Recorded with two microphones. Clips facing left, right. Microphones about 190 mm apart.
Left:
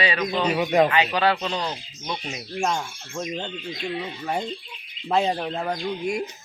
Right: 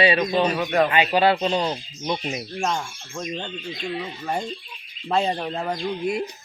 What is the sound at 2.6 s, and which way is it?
Speech, 5° left (ahead or behind).